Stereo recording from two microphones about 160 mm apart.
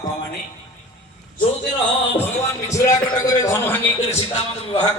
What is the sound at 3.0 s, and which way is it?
A man's voice, 25° left (ahead or behind).